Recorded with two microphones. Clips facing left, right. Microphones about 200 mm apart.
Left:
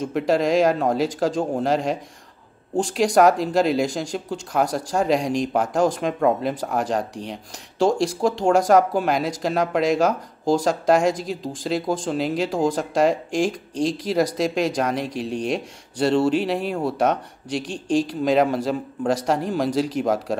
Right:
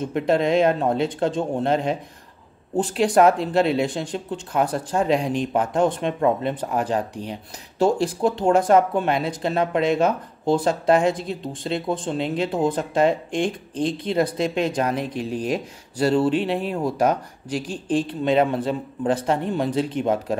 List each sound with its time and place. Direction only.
0.1 s speech: centre (ahead or behind)